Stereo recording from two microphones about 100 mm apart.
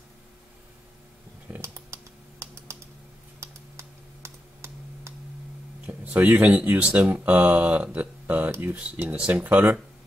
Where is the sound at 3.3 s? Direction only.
30° right (ahead or behind).